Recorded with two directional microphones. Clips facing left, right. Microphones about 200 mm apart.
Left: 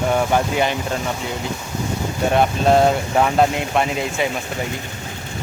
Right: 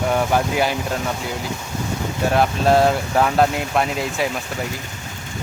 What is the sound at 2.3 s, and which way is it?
Speech, centre (ahead or behind).